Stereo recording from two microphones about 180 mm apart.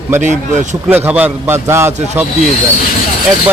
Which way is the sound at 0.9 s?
10° right (ahead or behind).